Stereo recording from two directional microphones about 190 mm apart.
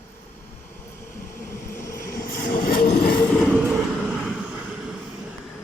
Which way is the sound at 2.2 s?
45° left (ahead or behind).